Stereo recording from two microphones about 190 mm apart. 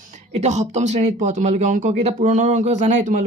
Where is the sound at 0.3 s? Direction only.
35° right (ahead or behind).